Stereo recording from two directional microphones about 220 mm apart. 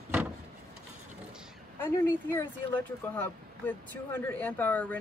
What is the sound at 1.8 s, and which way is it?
Speech, 10° left (ahead or behind).